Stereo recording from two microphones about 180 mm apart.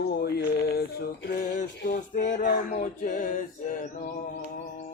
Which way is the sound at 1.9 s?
45° left (ahead or behind).